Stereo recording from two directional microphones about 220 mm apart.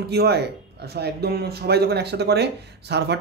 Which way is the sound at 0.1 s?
50° right (ahead or behind).